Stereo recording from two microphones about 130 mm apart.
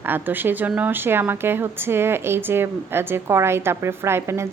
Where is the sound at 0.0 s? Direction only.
15° right (ahead or behind).